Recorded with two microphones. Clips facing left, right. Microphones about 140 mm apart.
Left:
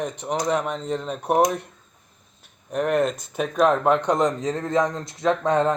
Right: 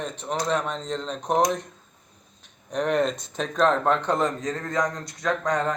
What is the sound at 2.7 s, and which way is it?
Speech, 5° left (ahead or behind).